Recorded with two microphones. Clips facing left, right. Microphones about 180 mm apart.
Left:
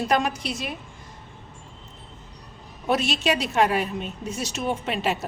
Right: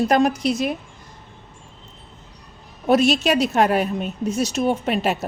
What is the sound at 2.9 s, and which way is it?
A woman's voice, 40° right (ahead or behind).